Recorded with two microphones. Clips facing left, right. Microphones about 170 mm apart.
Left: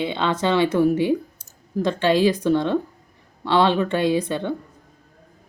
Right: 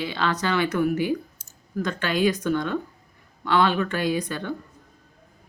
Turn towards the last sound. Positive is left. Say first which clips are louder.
# left 5 dB
turn(degrees=25)  # may be behind; listen again after turning